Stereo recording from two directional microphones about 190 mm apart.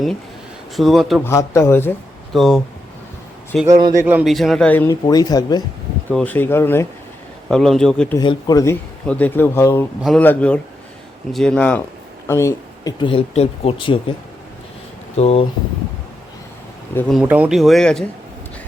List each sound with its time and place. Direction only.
0.8 s speech: centre (ahead or behind)
1.2 s speech: 15° left (ahead or behind)
2.3 s speech: centre (ahead or behind); by 5.6 s 20° left (ahead or behind)
6.1 s speech: 10° left (ahead or behind)
7.4 s speech: centre (ahead or behind)
8.2 s speech: 20° left (ahead or behind)
10.0 s speech: centre (ahead or behind); by 14.0 s 25° left (ahead or behind)
15.1 s speech: 35° left (ahead or behind)
16.9 s speech: 10° left (ahead or behind)
17.2 s speech: 10° right (ahead or behind)